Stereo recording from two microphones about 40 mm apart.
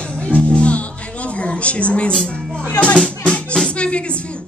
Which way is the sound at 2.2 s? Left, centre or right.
Left.